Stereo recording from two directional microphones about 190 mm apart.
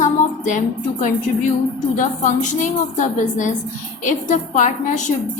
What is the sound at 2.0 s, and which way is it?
A woman's voice, 40° left (ahead or behind).